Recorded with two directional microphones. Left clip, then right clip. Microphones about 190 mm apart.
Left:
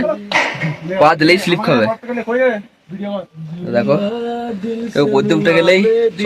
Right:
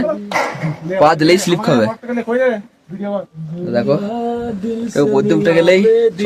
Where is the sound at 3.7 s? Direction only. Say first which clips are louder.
Left 1 dB; centre (ahead or behind).